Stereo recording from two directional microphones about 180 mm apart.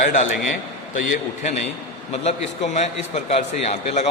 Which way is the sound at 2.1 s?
35° left (ahead or behind).